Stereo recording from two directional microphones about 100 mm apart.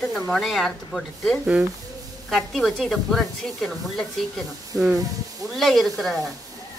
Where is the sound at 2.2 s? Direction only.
Centre (ahead or behind).